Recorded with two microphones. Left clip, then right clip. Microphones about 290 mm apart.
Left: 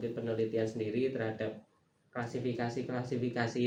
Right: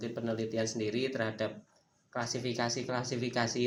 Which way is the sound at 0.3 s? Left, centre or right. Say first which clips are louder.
Left 1 dB; right.